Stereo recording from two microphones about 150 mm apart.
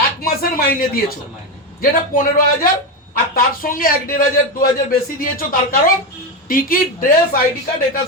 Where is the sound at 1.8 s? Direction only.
70° left (ahead or behind).